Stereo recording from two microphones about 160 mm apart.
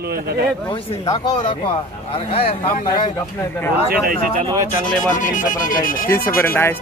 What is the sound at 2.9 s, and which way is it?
Speech, 25° left (ahead or behind).